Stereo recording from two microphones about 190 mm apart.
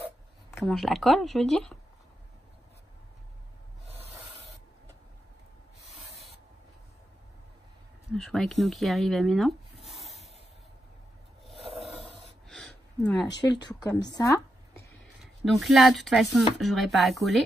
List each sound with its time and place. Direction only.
0.7 s speech: centre (ahead or behind)
8.1 s speech: centre (ahead or behind)
12.4 s a sound: 5° left (ahead or behind)
13.6 s speech: 20° left (ahead or behind)
15.4 s speech: centre (ahead or behind)